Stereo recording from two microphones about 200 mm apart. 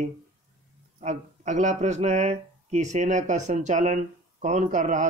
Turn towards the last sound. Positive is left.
turn(degrees=-35)  # may be behind; listen again after turning